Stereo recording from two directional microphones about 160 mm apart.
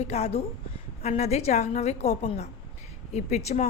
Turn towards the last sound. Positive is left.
turn(degrees=45)  # may be behind; listen again after turning